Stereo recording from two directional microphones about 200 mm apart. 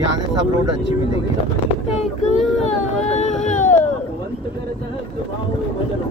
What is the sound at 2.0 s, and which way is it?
Baby cry, 35° left (ahead or behind).